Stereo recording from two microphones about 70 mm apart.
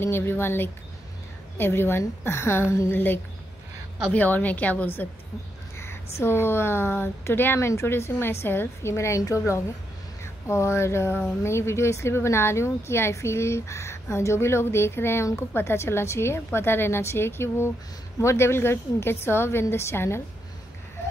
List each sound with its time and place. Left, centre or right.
0.0 s speech: left
2.9 s a woman's voice: left
5.8 s speech: left
10.2 s a sound: left
11.4 s speech: left